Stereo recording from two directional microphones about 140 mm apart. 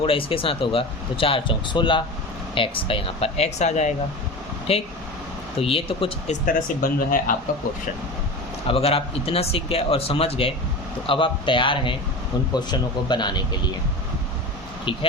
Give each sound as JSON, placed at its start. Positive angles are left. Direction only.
{"t": 0.0, "sound": "speech", "side_deg": 40}
{"t": 6.4, "sound": "speech", "side_deg": 85}
{"t": 8.6, "sound": "speech", "side_deg": 45}
{"t": 14.9, "sound": "speech", "side_deg": 35}